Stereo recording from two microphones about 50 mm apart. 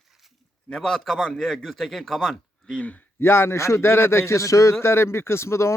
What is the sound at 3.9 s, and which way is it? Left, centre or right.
Speech, left.